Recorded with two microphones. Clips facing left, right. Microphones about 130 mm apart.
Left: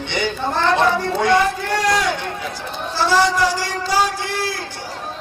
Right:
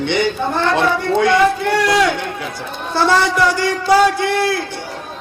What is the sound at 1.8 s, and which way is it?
A man's voice, 60° right (ahead or behind).